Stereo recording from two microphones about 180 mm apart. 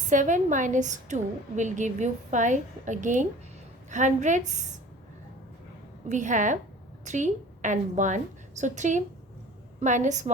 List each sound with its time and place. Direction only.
0.1 s a woman's voice: 45° right (ahead or behind)
6.1 s a woman's voice: 45° right (ahead or behind)